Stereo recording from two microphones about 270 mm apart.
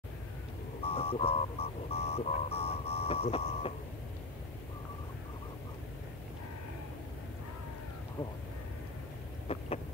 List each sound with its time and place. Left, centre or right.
0.8 s speech: left
9.5 s vehicle: left